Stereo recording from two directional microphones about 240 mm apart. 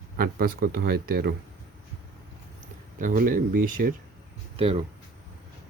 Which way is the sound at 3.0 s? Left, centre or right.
Right.